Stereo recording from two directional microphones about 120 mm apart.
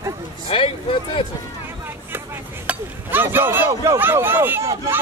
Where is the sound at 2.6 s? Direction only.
15° right (ahead or behind).